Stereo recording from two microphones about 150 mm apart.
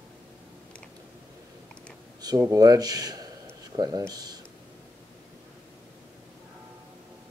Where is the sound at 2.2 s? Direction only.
25° right (ahead or behind).